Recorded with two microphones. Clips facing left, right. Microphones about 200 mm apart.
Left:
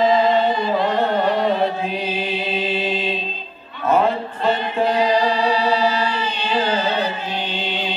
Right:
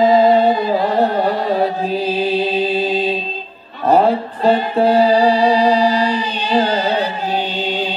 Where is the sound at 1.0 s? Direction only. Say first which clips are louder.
Right 2 dB; 35° right (ahead or behind).